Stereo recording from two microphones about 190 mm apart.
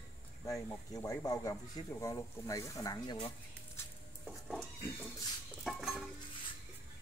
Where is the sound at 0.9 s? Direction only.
15° left (ahead or behind).